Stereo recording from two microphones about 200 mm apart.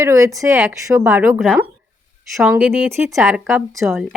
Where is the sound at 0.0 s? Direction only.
15° right (ahead or behind).